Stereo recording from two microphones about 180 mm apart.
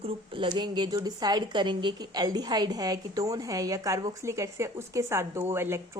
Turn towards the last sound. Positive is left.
turn(degrees=-15)  # may be behind; listen again after turning